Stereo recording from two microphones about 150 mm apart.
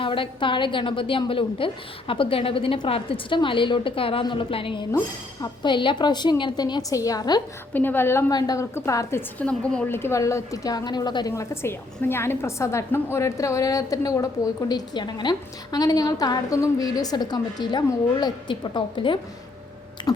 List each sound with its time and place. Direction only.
0.0 s a woman's voice: 35° left (ahead or behind)
4.9 s a woman's voice: 25° left (ahead or behind)
7.7 s a woman's voice: 10° left (ahead or behind); by 19.2 s 35° left (ahead or behind)
20.0 s a sound: 30° left (ahead or behind)